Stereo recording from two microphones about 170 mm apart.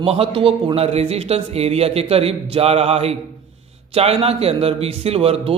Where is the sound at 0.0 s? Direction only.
35° right (ahead or behind).